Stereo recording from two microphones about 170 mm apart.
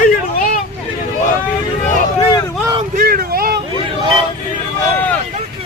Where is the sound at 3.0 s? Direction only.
60° right (ahead or behind).